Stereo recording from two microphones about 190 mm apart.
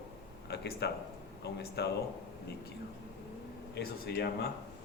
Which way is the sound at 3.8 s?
60° left (ahead or behind).